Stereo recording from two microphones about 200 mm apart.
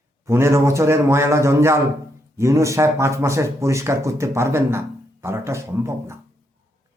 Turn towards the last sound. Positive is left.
turn(degrees=-15)  # may be behind; listen again after turning